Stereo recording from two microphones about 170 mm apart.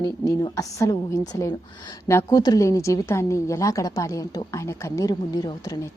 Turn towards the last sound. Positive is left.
turn(degrees=20)  # may be behind; listen again after turning